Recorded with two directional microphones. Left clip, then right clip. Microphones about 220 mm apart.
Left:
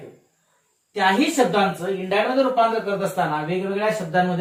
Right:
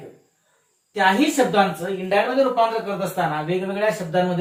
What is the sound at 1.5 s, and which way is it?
Speech, 15° left (ahead or behind).